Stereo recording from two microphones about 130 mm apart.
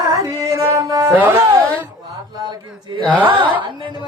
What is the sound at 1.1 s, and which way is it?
Music, 15° right (ahead or behind).